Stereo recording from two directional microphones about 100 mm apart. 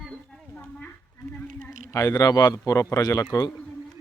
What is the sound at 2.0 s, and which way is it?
Speech, 35° left (ahead or behind).